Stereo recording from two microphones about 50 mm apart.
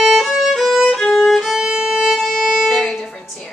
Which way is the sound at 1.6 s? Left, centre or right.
Centre.